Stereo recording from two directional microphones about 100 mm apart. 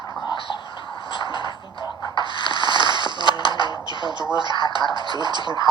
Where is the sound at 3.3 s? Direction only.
50° left (ahead or behind).